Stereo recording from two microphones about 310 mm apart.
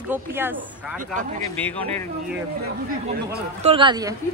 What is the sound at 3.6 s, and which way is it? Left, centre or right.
Speech, centre.